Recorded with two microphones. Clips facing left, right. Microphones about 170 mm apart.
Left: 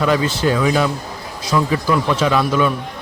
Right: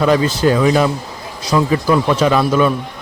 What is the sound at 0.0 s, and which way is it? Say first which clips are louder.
Speech: right 3 dB; 40° right (ahead or behind).